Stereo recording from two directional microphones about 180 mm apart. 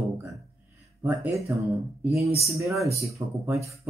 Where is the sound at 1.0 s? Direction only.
15° right (ahead or behind).